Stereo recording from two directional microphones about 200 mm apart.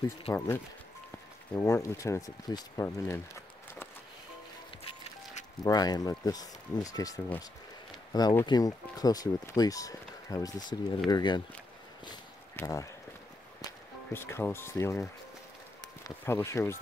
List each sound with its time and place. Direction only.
0.3 s speech: 30° left (ahead or behind)
1.5 s speech: 15° left (ahead or behind)
5.6 s speech: 20° left (ahead or behind)
12.1 s a sound: 15° left (ahead or behind)
13.7 s speech: 10° left (ahead or behind)